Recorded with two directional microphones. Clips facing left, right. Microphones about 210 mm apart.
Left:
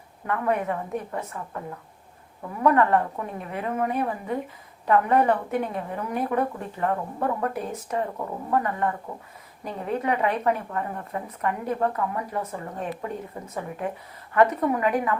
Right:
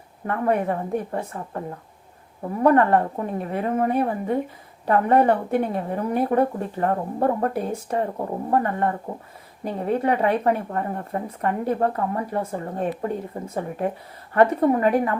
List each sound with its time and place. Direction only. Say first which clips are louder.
0.3 s speech: right 3 dB; 35° right (ahead or behind)